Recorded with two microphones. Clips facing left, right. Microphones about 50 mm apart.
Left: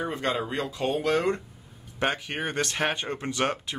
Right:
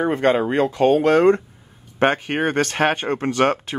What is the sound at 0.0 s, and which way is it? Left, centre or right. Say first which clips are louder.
Speech: right 10 dB; right.